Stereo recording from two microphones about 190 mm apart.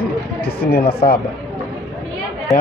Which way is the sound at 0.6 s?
55° left (ahead or behind).